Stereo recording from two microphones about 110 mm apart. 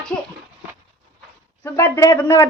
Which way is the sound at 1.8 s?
25° left (ahead or behind).